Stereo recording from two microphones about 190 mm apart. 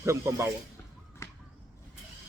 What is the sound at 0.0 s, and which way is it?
Speech, 15° right (ahead or behind).